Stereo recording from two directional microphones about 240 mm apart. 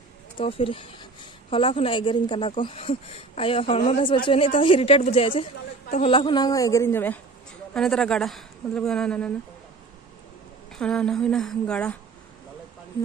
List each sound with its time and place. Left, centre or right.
0.4 s a woman's voice: left; by 9.3 s centre
10.7 s a woman's voice: centre